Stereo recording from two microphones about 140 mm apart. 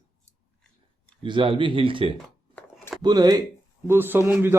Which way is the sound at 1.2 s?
40° right (ahead or behind).